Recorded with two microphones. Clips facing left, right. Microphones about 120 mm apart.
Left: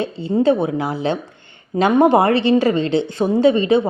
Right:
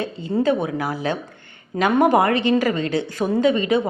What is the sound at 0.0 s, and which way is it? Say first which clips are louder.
Speech: left 4 dB; 30° left (ahead or behind).